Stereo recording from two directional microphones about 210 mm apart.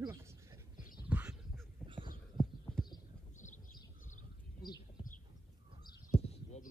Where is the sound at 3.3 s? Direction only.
35° left (ahead or behind).